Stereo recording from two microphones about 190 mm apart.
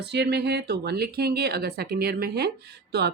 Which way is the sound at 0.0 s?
60° right (ahead or behind).